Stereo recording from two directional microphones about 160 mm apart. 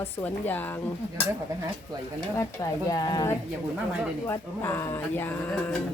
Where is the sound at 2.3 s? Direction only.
20° left (ahead or behind).